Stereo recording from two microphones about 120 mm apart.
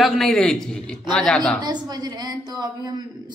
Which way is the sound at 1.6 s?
35° right (ahead or behind).